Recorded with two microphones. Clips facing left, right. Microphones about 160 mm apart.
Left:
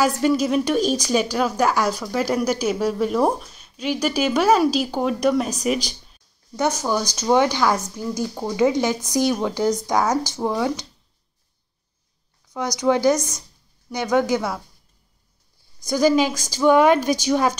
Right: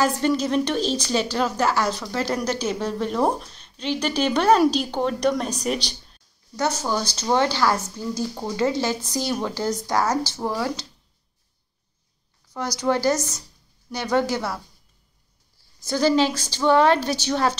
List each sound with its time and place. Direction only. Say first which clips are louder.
0.0 s a woman's voice: left 2 dB; 10° left (ahead or behind)
5.9 s a sound: left 1 dB; 5° left (ahead or behind)
6.5 s a woman's voice: left 2 dB; 15° left (ahead or behind)
12.7 s a woman's voice: left 3 dB; 15° left (ahead or behind)
15.8 s a woman's voice: left 2 dB; 10° left (ahead or behind)